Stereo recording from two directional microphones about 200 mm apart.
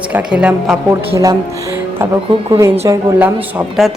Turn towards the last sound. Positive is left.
turn(degrees=-5)  # may be behind; listen again after turning